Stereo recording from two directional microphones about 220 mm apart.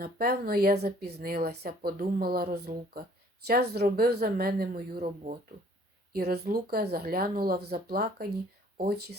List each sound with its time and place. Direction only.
0.0 s speech: 45° right (ahead or behind)